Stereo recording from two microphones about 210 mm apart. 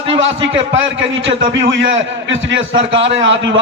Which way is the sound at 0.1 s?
60° right (ahead or behind).